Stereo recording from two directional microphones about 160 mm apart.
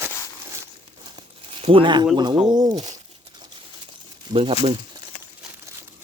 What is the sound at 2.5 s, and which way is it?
Speech, 25° right (ahead or behind).